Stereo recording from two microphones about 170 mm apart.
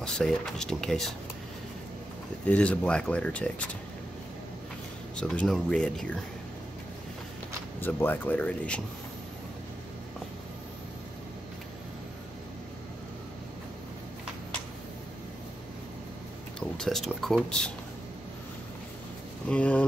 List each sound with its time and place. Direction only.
0.0 s speech: 5° left (ahead or behind)
2.4 s speech: 5° left (ahead or behind)
5.1 s speech: 5° left (ahead or behind)
7.8 s speech: 10° left (ahead or behind)
16.5 s speech: 5° left (ahead or behind)
19.5 s speech: 10° left (ahead or behind)